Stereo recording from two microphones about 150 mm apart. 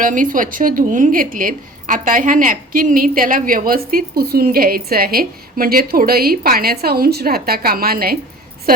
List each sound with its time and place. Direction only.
0.0 s speech: 65° right (ahead or behind); by 8.2 s 85° right